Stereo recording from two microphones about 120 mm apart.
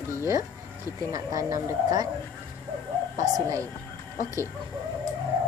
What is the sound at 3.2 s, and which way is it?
Speech, 25° right (ahead or behind).